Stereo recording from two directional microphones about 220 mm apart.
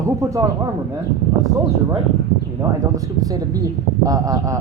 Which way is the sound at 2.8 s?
15° right (ahead or behind).